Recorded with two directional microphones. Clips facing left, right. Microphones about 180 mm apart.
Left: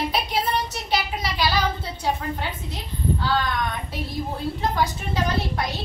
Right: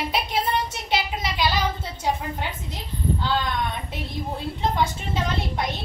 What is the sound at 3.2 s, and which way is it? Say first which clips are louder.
A woman's voice: left 1 dB; 25° right (ahead or behind).